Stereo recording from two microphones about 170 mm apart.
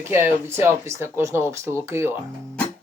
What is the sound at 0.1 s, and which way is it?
Speech, 15° right (ahead or behind).